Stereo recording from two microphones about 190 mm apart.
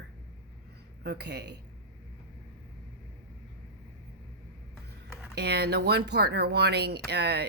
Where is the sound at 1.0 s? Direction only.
60° right (ahead or behind).